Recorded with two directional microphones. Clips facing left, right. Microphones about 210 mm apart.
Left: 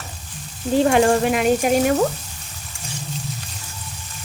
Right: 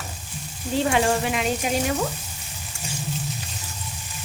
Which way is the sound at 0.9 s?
50° left (ahead or behind).